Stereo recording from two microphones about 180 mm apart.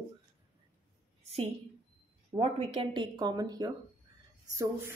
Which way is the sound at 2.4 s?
30° right (ahead or behind).